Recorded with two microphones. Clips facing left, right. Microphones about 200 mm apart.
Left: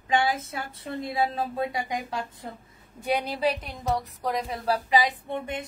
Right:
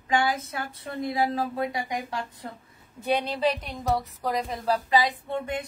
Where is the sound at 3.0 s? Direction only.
10° left (ahead or behind).